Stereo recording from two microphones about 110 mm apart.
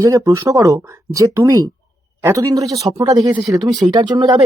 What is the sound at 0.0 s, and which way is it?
Speech, 30° right (ahead or behind).